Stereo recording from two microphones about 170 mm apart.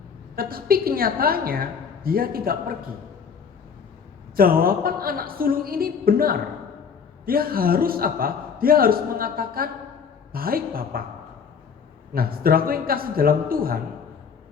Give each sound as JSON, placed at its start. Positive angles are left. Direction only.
{"t": 0.3, "sound": "a man's voice", "side_deg": -60}
{"t": 4.4, "sound": "a man's voice", "side_deg": -60}
{"t": 12.1, "sound": "a man's voice", "side_deg": -60}